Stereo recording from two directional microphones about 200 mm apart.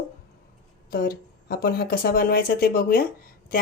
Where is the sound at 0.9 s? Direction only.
45° left (ahead or behind).